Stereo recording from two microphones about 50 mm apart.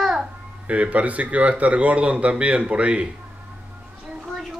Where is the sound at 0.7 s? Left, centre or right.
Right.